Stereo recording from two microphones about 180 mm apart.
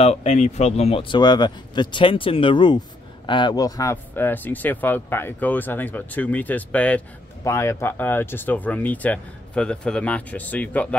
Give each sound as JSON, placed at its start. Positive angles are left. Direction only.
{"t": 0.0, "sound": "speech", "side_deg": 35}